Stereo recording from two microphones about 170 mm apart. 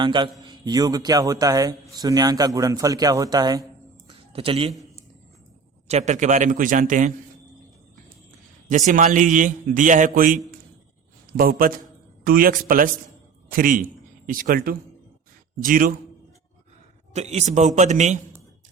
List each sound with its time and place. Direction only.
0.0 s a man's voice: 25° right (ahead or behind)
4.3 s a man's voice: 35° right (ahead or behind)
5.9 s a man's voice: 40° right (ahead or behind)
8.7 s a man's voice: 45° right (ahead or behind)
17.2 s a man's voice: 40° right (ahead or behind)